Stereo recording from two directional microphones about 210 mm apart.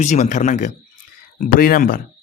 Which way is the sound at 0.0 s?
35° left (ahead or behind).